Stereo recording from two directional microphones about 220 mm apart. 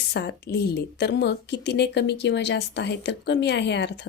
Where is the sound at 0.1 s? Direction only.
50° left (ahead or behind).